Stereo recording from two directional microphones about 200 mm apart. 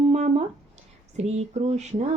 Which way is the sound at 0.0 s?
30° right (ahead or behind).